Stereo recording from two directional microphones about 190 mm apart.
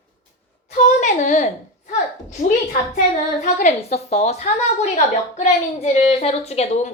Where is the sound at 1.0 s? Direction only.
40° left (ahead or behind).